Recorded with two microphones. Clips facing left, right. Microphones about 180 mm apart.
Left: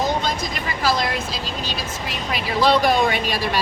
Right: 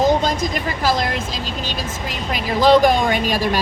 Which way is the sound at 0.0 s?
45° right (ahead or behind).